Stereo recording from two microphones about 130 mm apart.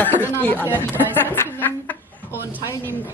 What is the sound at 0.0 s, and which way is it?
Speech, 15° left (ahead or behind).